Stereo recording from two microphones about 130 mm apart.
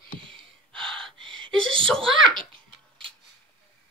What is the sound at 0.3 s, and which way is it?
Gasp, 40° right (ahead or behind).